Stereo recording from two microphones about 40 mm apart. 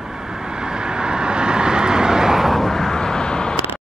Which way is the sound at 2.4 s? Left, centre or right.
Centre.